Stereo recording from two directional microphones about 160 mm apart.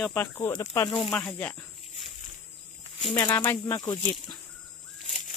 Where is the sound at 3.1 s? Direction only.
15° left (ahead or behind).